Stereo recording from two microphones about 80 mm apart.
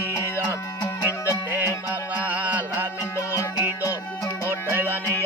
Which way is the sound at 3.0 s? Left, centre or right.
Left.